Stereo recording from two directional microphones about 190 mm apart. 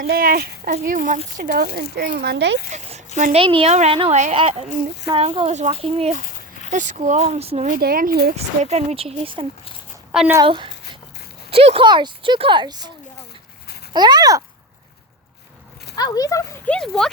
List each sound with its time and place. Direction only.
0.0 s speech: 50° right (ahead or behind)
3.2 s speech: 35° right (ahead or behind)
7.8 s speech: 50° right (ahead or behind)
8.4 s speech: 35° right (ahead or behind)
10.1 s a woman's voice: 10° right (ahead or behind)
10.4 s speech: 25° right (ahead or behind)
13.9 s speech: 20° right (ahead or behind)
16.0 s speech: 20° left (ahead or behind)
16.6 s speech: 5° left (ahead or behind)